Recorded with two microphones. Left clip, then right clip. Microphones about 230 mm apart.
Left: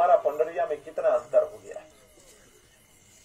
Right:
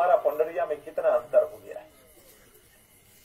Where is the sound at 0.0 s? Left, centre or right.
Right.